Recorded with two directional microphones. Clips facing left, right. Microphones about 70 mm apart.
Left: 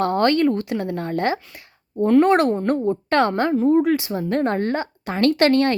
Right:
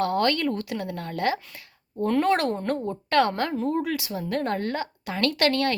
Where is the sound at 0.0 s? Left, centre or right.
Left.